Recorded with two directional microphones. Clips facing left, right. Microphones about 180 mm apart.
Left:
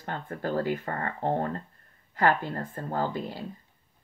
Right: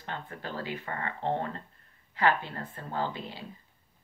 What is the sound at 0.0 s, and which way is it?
Speech, 45° left (ahead or behind).